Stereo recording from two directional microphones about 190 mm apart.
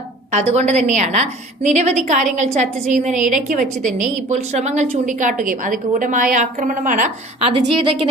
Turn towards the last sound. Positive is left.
turn(degrees=-30)  # may be behind; listen again after turning